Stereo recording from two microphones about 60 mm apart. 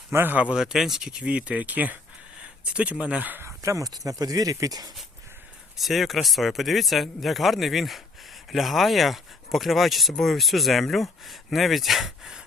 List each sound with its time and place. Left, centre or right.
0.1 s speech: right
0.5 s speech: centre; by 3.4 s right
3.4 s speech: right
5.7 s speech: centre